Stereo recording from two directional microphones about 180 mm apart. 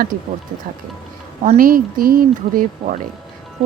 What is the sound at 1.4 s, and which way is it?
Speech, 45° right (ahead or behind).